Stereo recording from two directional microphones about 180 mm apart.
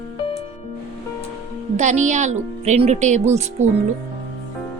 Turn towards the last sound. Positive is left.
turn(degrees=-40)  # may be behind; listen again after turning